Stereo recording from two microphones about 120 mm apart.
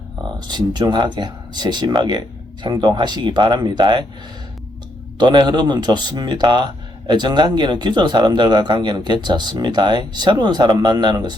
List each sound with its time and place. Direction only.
0.3 s a man's voice: 35° right (ahead or behind)
5.1 s a man's voice: 35° right (ahead or behind)